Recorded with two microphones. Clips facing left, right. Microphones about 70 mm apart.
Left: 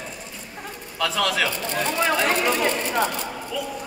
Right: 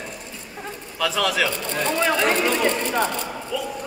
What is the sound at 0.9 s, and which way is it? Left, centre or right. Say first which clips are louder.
Speech: right 1 dB; centre.